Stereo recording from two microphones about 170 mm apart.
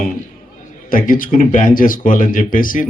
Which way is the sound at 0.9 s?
55° left (ahead or behind).